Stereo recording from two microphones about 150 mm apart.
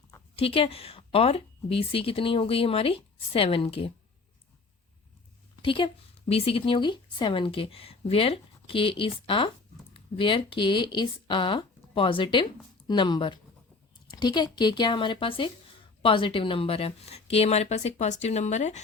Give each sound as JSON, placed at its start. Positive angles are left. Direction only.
{"t": 0.3, "sound": "speech", "side_deg": 40}
{"t": 5.6, "sound": "speech", "side_deg": 35}